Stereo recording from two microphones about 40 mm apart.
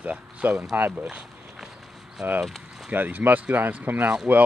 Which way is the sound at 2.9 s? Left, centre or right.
Right.